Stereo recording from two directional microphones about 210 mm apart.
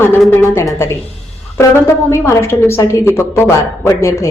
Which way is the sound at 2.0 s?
15° left (ahead or behind).